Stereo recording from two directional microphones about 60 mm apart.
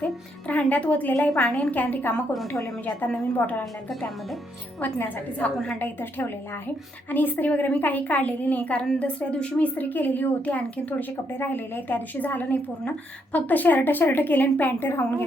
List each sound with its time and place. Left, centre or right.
0.0 s a woman's voice: left
3.8 s speech: centre
4.9 s a woman's voice: left
9.9 s a woman's voice: left
11.3 s a woman's voice: left